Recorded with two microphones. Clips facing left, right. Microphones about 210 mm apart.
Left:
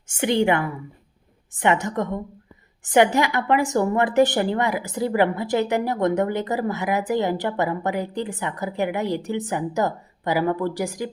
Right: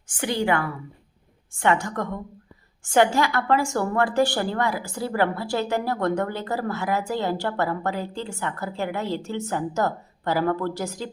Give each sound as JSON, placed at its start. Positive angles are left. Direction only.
{"t": 0.1, "sound": "a woman's voice", "side_deg": 25}